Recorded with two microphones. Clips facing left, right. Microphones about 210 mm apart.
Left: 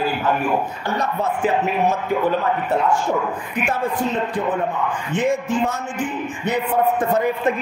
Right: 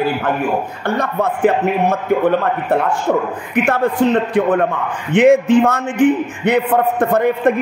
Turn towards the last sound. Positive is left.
turn(degrees=-60)  # may be behind; listen again after turning